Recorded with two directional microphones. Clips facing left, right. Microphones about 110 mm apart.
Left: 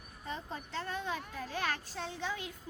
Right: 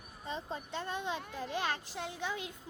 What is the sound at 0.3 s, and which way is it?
A child's voice, 20° right (ahead or behind).